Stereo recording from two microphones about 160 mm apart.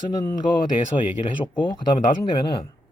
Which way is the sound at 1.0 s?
30° left (ahead or behind).